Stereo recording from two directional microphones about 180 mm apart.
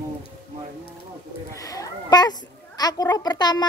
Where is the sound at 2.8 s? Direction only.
20° left (ahead or behind).